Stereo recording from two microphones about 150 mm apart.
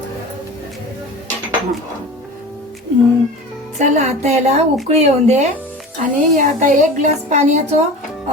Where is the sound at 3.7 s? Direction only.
50° right (ahead or behind).